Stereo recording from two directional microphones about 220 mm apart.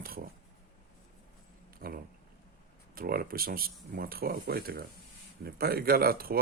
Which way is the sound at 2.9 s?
40° right (ahead or behind).